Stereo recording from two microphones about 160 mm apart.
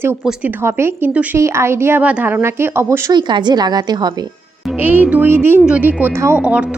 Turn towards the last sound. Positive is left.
turn(degrees=-5)  # may be behind; listen again after turning